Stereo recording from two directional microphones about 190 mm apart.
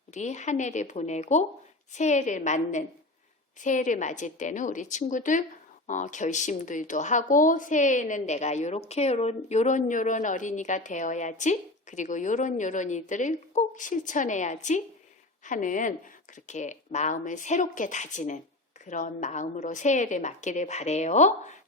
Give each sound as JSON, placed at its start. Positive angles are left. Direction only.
{"t": 0.1, "sound": "a woman's voice", "side_deg": 40}